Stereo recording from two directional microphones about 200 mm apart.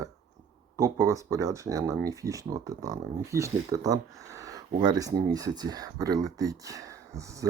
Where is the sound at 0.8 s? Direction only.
15° right (ahead or behind).